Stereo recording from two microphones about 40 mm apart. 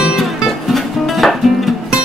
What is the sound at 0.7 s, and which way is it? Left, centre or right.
Music, centre.